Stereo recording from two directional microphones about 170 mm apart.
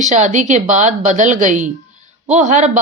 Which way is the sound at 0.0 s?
45° right (ahead or behind).